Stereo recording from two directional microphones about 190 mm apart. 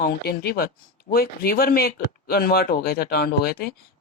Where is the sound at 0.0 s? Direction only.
55° left (ahead or behind).